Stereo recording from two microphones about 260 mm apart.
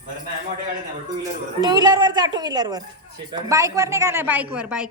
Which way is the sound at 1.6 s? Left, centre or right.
Centre.